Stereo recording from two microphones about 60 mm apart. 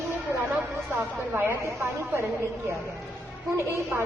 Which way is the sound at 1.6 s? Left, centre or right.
Right.